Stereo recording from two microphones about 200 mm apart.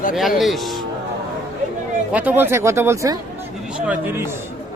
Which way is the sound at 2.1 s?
10° right (ahead or behind).